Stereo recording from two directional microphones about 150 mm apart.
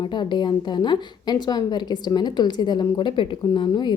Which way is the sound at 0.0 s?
30° left (ahead or behind).